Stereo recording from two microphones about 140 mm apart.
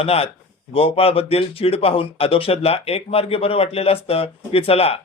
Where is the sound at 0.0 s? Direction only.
45° left (ahead or behind).